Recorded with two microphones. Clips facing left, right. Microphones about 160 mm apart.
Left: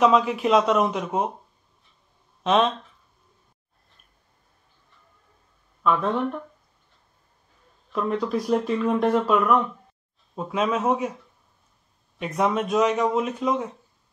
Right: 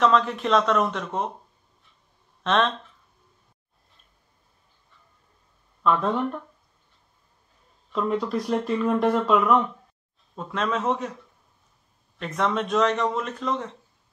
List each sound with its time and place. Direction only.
0.0 s speech: 5° left (ahead or behind)
2.4 s speech: 5° left (ahead or behind)
5.8 s speech: centre (ahead or behind)
7.9 s a man's voice: centre (ahead or behind)
12.2 s a man's voice: 5° left (ahead or behind)